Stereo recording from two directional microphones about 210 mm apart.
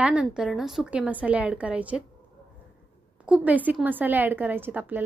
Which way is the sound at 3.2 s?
5° right (ahead or behind).